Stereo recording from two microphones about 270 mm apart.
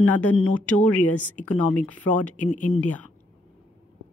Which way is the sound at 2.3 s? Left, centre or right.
Left.